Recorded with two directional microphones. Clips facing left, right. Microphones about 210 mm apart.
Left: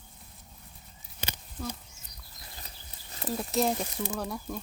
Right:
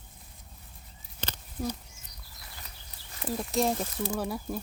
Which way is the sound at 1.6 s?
20° right (ahead or behind).